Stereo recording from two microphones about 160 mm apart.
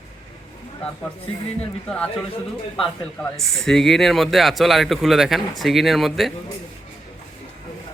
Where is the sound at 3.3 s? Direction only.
Centre (ahead or behind).